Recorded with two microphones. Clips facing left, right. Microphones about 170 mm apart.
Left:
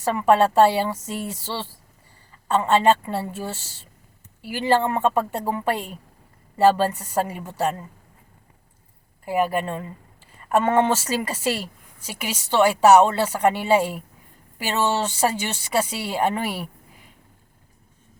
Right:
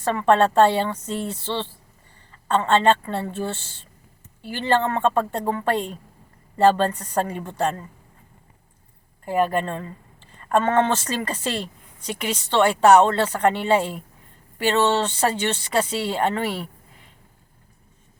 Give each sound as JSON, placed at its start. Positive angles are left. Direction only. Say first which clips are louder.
{"t": 0.0, "sound": "speech", "louder": "even", "side_deg": 10}
{"t": 9.2, "sound": "speech", "louder": "right 1 dB", "side_deg": 10}